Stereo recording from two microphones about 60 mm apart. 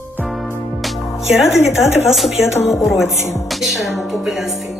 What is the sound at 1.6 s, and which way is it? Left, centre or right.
Speech, left.